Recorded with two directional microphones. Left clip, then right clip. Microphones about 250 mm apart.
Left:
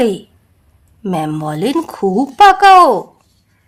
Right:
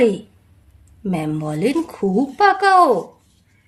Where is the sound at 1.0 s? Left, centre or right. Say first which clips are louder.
Left 5 dB; left.